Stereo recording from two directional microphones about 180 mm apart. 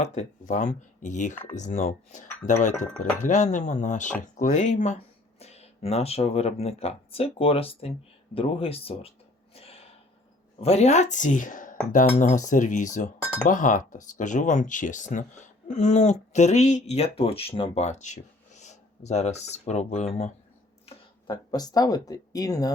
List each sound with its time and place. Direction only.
0.0 s speech: 40° left (ahead or behind)
9.6 s a sound: 35° left (ahead or behind)
10.6 s speech: 35° left (ahead or behind)
20.8 s speech: 25° left (ahead or behind)